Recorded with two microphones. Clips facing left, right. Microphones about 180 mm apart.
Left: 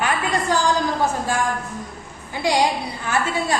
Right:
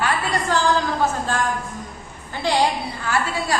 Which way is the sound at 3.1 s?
20° left (ahead or behind).